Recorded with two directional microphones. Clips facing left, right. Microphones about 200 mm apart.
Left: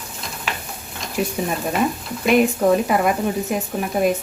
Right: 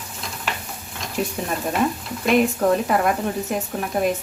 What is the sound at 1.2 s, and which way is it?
Speech, 10° left (ahead or behind).